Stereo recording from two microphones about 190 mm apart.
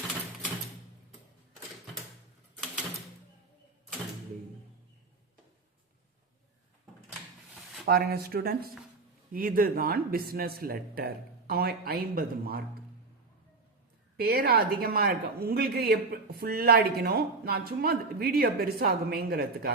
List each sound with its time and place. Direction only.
7.1 s a sound: centre (ahead or behind)
7.9 s speech: 55° right (ahead or behind)
14.2 s speech: 55° right (ahead or behind)